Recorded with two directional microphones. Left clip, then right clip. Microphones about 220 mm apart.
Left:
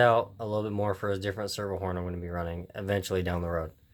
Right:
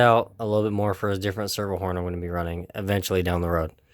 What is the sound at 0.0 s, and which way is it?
Speech, 35° right (ahead or behind).